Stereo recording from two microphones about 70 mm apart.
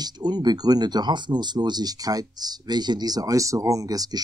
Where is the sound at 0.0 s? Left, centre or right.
Right.